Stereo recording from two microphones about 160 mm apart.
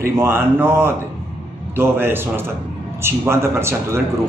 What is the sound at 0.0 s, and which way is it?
A man's voice, 15° right (ahead or behind).